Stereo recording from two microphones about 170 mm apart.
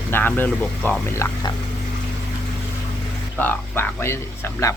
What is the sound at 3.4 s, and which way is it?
Speech, 10° left (ahead or behind).